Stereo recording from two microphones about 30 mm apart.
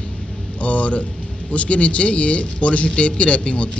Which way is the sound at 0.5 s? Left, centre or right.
Left.